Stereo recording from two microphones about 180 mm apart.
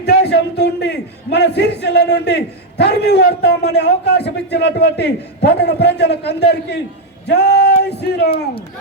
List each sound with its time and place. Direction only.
0.0 s a man's voice: 65° left (ahead or behind)